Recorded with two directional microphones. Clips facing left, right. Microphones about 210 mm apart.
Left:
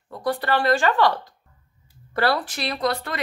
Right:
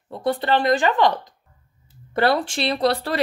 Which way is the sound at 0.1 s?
25° right (ahead or behind).